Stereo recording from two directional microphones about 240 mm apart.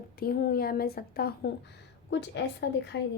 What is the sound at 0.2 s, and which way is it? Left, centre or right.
A woman's voice, left.